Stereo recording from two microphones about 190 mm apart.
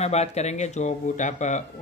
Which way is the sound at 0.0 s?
35° left (ahead or behind).